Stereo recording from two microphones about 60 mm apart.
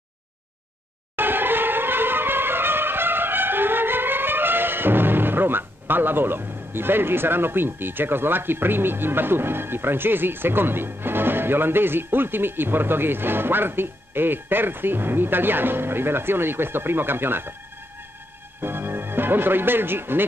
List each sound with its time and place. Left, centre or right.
1.1 s music: right
18.6 s speech: right